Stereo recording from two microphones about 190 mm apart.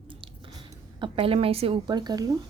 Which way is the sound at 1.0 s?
30° right (ahead or behind).